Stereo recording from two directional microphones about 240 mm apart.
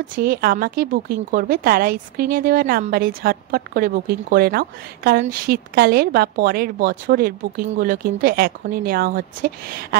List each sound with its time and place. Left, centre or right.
0.1 s a woman's voice: right